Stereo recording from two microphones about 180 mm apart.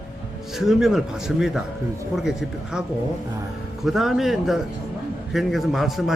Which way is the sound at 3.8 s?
Centre (ahead or behind).